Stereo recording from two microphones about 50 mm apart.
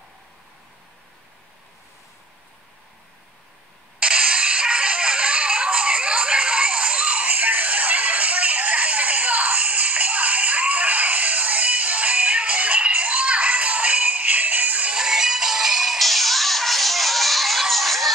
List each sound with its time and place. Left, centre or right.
4.0 s music: right
14.9 s music: centre